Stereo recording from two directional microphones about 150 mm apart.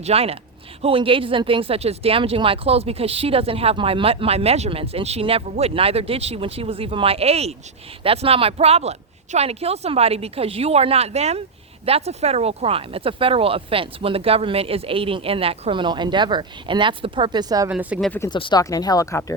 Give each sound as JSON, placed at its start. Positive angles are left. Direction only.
{"t": 0.0, "sound": "speech", "side_deg": -40}
{"t": 17.7, "sound": "speech", "side_deg": -10}
{"t": 18.3, "sound": "speech", "side_deg": 30}